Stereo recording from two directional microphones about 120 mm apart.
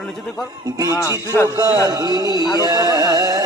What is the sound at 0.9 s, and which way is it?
Mantra, 30° left (ahead or behind).